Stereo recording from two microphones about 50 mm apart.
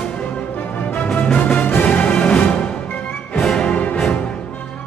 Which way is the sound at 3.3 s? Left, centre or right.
Centre.